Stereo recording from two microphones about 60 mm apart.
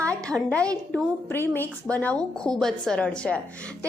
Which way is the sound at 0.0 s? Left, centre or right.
Centre.